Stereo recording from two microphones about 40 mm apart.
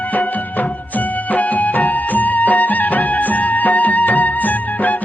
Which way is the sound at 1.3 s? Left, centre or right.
Left.